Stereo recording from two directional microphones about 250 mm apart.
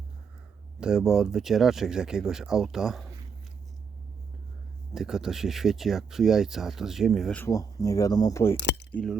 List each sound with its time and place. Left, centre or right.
0.8 s speech: centre
4.9 s speech: centre
8.5 s speech: left
8.9 s speech: centre